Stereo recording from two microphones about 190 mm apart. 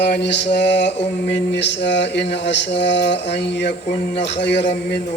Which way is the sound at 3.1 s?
65° left (ahead or behind).